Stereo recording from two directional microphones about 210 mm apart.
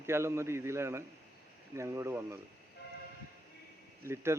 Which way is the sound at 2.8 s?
50° left (ahead or behind).